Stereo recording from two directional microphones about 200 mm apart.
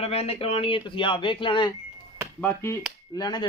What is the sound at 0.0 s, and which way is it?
Speech, 30° left (ahead or behind).